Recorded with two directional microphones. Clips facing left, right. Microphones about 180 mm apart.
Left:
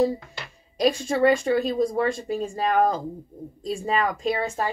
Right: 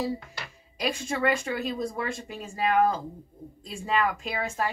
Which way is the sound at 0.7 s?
35° left (ahead or behind).